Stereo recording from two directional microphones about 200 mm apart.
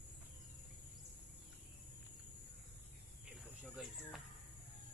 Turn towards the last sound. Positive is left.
turn(degrees=0)  # may be behind; listen again after turning